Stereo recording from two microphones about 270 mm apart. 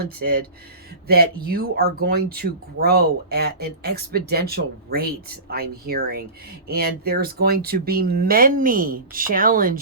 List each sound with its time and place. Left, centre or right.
0.0 s speech: right